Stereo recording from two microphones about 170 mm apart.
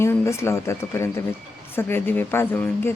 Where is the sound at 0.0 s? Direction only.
15° left (ahead or behind).